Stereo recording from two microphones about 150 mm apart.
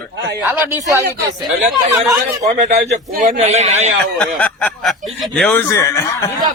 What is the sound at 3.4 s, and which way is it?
Speech, 45° right (ahead or behind).